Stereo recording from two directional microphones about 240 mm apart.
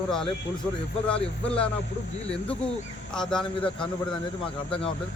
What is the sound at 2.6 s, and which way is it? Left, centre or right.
Speech, centre.